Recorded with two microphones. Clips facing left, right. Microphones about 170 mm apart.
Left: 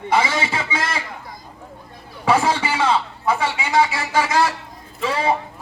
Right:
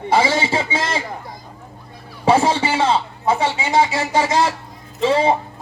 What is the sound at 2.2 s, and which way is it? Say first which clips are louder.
A man's voice: right 3 dB; 25° right (ahead or behind).